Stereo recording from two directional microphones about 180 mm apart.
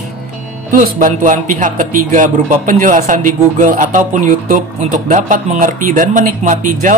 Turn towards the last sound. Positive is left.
turn(degrees=-45)  # may be behind; listen again after turning